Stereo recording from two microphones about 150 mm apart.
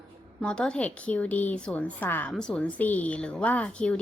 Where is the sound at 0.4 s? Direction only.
5° left (ahead or behind).